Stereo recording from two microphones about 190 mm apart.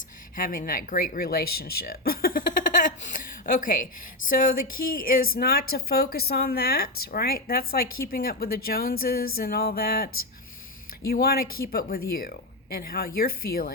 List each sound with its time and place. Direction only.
0.3 s speech: 45° left (ahead or behind)